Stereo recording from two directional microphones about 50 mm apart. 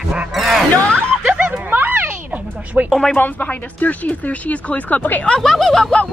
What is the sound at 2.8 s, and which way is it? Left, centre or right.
Speech, right.